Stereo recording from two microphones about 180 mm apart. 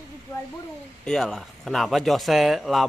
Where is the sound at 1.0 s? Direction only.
Centre (ahead or behind).